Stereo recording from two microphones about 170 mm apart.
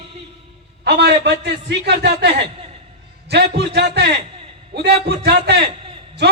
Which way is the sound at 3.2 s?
75° right (ahead or behind).